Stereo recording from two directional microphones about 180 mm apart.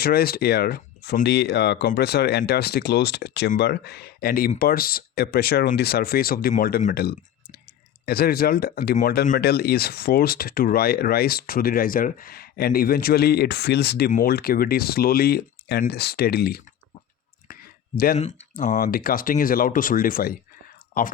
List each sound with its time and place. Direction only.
0.0 s speech: 60° left (ahead or behind)
17.5 s a sound: 55° left (ahead or behind)
18.5 s speech: 50° left (ahead or behind)